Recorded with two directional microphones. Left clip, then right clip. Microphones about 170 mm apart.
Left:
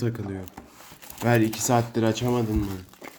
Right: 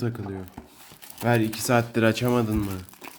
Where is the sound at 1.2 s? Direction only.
Centre (ahead or behind).